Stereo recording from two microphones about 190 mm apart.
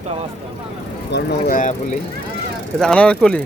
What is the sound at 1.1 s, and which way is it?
Speech, 55° left (ahead or behind).